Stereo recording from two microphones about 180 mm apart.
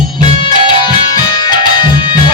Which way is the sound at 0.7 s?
25° left (ahead or behind).